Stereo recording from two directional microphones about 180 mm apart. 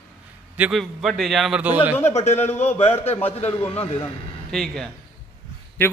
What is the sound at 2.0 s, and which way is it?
Speech, 35° left (ahead or behind).